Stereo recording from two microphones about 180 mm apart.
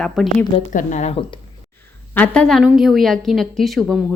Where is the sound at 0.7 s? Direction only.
40° left (ahead or behind).